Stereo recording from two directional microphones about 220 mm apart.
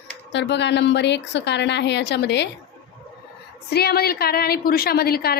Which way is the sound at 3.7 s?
45° left (ahead or behind).